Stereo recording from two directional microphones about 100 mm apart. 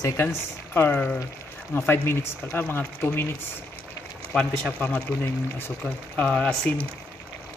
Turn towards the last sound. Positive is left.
turn(degrees=10)  # may be behind; listen again after turning